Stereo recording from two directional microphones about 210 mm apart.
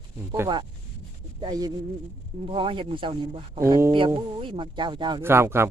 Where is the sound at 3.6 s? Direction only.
15° right (ahead or behind).